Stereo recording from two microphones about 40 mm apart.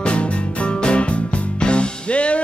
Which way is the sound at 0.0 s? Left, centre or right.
Left.